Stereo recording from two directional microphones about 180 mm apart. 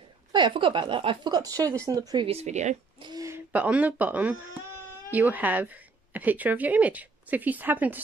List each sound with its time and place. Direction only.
0.3 s speech: 25° right (ahead or behind)
2.2 s speech: 35° right (ahead or behind)
3.0 s a woman's voice: 20° right (ahead or behind)